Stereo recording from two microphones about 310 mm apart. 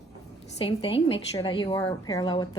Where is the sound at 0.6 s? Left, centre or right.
Centre.